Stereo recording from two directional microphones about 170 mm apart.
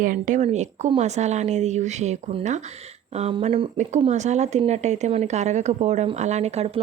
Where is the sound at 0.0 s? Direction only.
50° right (ahead or behind).